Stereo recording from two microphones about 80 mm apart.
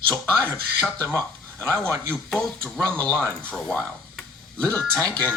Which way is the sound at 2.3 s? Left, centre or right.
Centre.